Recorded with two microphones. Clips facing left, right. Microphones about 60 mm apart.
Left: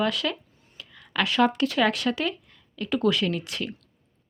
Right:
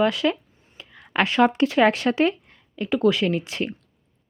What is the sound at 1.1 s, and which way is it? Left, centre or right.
Speech, right.